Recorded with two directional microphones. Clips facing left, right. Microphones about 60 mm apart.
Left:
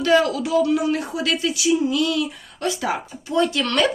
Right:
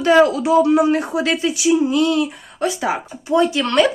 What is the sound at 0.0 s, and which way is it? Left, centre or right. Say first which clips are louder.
A woman's voice: right 5 dB; right.